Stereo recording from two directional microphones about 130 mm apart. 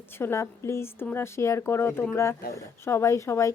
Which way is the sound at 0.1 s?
20° left (ahead or behind).